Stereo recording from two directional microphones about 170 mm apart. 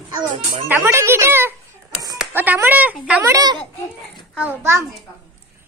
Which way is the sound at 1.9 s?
20° right (ahead or behind).